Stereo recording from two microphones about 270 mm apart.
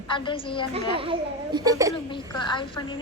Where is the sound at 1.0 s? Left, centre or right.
Centre.